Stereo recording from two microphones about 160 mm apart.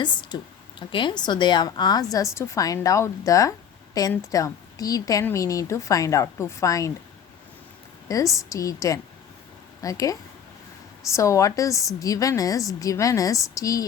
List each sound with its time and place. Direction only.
0.0 s a woman's voice: 30° left (ahead or behind)
8.0 s a woman's voice: 20° left (ahead or behind)